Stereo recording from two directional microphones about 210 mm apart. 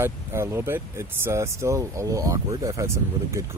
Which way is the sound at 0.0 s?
10° right (ahead or behind).